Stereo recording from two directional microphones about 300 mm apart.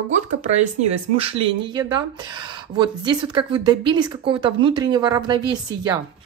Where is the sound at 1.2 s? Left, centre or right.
Centre.